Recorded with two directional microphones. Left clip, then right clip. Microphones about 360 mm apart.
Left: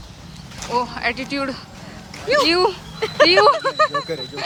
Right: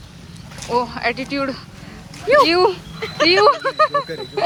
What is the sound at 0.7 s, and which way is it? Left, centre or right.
Speech, centre.